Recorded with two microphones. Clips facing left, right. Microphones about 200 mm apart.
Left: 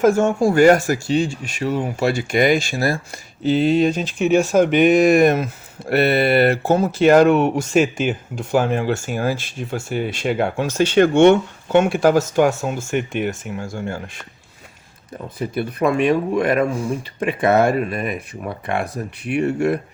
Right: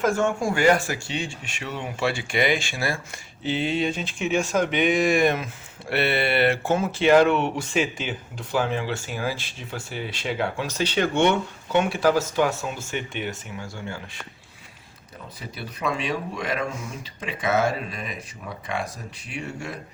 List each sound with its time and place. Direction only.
0.0 s speech: 40° left (ahead or behind)
15.4 s speech: 55° left (ahead or behind)